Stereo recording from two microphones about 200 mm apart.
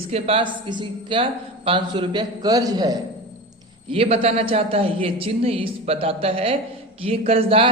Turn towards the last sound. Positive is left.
turn(degrees=-30)  # may be behind; listen again after turning